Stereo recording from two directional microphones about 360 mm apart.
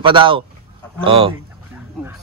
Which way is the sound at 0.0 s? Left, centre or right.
Centre.